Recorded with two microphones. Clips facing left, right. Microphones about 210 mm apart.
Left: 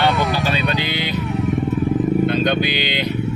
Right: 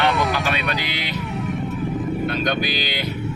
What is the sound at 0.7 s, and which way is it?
Vehicle, 25° left (ahead or behind).